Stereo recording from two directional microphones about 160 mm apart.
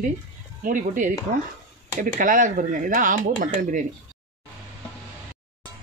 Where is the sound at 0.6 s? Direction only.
55° right (ahead or behind).